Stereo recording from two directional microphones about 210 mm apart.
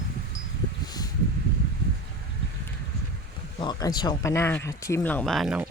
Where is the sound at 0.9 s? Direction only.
20° left (ahead or behind).